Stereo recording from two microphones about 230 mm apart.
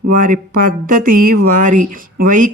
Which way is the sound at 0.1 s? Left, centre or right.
Right.